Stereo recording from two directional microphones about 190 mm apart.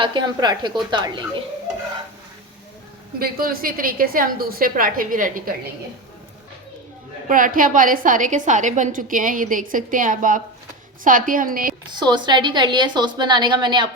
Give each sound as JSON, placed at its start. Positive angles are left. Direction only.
{"t": 0.0, "sound": "a woman's voice", "side_deg": -25}
{"t": 3.2, "sound": "a woman's voice", "side_deg": -50}
{"t": 7.3, "sound": "a woman's voice", "side_deg": -45}
{"t": 11.9, "sound": "a woman's voice", "side_deg": -25}